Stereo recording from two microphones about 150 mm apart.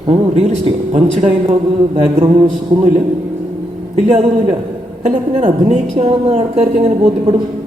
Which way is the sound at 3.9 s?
50° right (ahead or behind).